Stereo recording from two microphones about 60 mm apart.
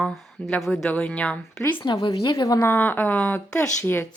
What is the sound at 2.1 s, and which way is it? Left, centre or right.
Speech, left.